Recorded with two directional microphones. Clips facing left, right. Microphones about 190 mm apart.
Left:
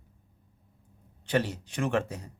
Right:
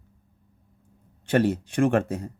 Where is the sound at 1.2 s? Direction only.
50° right (ahead or behind).